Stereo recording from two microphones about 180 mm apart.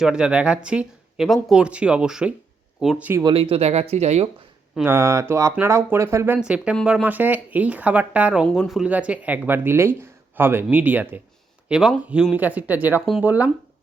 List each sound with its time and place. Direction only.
0.0 s speech: 5° right (ahead or behind)
3.2 s speech: 30° right (ahead or behind)
4.8 s speech: 15° right (ahead or behind)